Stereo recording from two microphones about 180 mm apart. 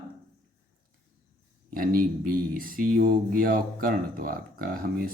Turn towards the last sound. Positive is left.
turn(degrees=-55)  # may be behind; listen again after turning